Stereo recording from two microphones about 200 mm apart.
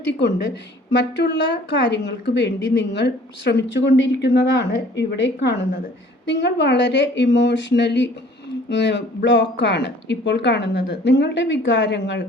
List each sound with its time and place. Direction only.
0.2 s a woman's voice: 60° left (ahead or behind)